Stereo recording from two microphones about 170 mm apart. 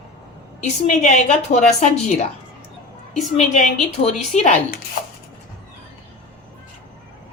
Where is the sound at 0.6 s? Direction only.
45° left (ahead or behind).